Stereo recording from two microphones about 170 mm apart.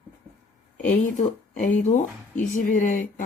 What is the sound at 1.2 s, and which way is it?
Speech, 50° left (ahead or behind).